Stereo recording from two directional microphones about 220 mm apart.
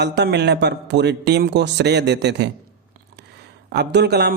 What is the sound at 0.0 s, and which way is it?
A man's voice, 50° right (ahead or behind).